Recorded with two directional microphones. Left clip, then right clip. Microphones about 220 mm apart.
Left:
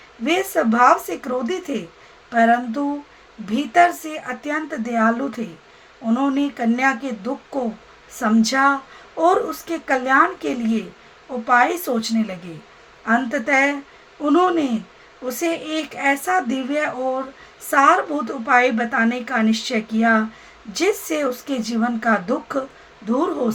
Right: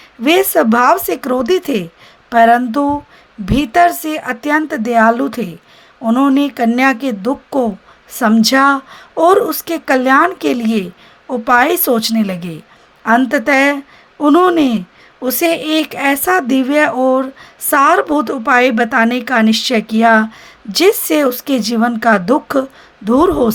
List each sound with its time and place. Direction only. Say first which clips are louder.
0.3 s speech: right 8 dB; 45° right (ahead or behind)